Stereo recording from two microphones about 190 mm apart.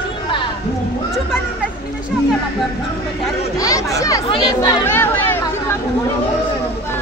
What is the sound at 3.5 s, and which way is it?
Speech, 20° left (ahead or behind).